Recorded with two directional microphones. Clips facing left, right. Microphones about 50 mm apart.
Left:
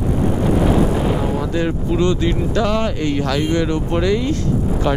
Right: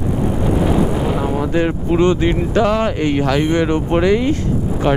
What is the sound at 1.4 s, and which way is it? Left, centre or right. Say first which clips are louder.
Speech: right 3 dB; right.